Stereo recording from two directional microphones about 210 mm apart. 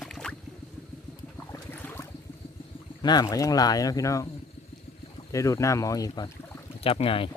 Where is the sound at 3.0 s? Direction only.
20° left (ahead or behind).